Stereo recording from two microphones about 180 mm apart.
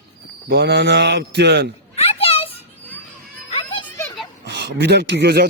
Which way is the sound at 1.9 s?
35° left (ahead or behind).